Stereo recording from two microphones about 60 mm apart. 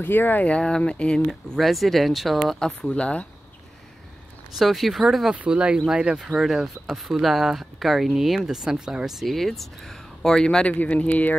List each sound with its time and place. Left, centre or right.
0.0 s speech: left; by 1.2 s centre
1.2 s speech: centre
2.6 s speech: centre
4.6 s speech: centre
5.3 s speech: right; by 11.3 s left